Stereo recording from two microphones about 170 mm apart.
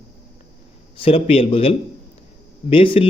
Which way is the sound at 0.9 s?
35° left (ahead or behind).